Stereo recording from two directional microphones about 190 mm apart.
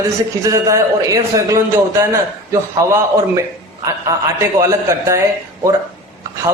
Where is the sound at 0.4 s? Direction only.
15° right (ahead or behind).